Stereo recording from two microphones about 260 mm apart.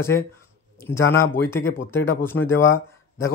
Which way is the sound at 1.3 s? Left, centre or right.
Centre.